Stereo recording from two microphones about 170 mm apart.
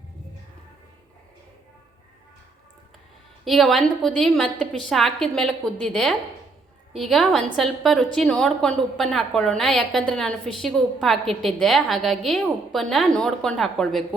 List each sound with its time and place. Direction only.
3.4 s a woman's voice: centre (ahead or behind)